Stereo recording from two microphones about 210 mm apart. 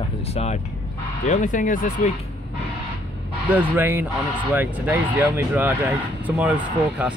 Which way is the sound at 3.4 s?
10° right (ahead or behind).